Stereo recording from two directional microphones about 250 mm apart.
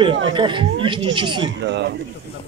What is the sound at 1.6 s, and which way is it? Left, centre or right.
Speech, right.